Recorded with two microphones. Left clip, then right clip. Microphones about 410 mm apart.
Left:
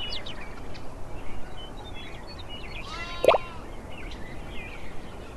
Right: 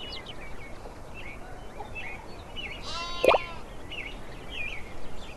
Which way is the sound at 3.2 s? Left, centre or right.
Centre.